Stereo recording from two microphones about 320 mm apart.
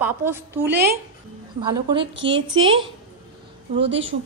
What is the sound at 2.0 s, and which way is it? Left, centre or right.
Speech, right.